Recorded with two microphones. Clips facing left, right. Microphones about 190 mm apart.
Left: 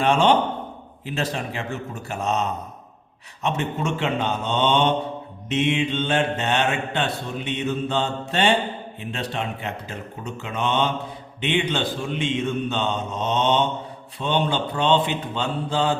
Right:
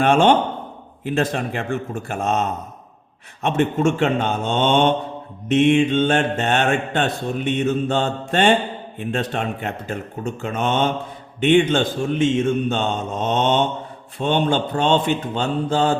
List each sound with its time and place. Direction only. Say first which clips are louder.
0.0 s mantra: right 3 dB; 50° right (ahead or behind)